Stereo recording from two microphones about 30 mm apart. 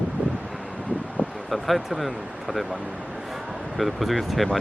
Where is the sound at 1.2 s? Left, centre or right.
Left.